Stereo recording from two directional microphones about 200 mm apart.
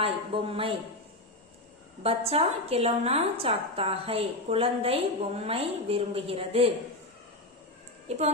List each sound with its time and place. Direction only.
0.0 s a woman's voice: 30° right (ahead or behind)
2.0 s a woman's voice: 30° right (ahead or behind)
8.0 s speech: 35° right (ahead or behind)